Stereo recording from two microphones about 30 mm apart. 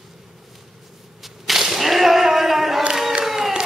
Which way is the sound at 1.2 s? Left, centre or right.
Centre.